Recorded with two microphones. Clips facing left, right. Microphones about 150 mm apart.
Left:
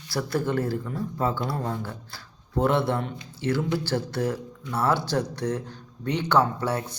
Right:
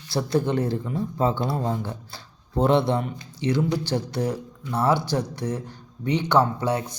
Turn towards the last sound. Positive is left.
turn(degrees=-15)  # may be behind; listen again after turning